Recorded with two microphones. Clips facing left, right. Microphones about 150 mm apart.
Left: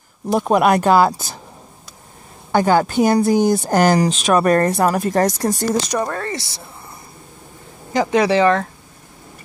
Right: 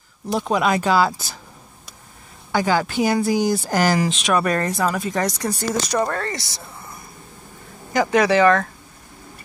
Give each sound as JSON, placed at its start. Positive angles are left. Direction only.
{"t": 0.3, "sound": "speech", "side_deg": 50}
{"t": 2.5, "sound": "speech", "side_deg": 50}
{"t": 5.9, "sound": "speech", "side_deg": 15}
{"t": 7.9, "sound": "speech", "side_deg": 25}